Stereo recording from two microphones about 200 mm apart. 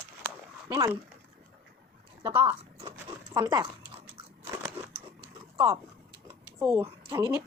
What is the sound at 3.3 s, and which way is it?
Speech, 20° right (ahead or behind).